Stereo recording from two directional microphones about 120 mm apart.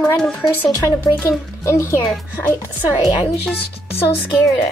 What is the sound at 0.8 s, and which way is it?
Speech, 20° left (ahead or behind).